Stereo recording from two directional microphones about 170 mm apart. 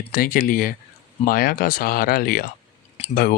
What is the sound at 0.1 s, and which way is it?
Speech, 55° left (ahead or behind).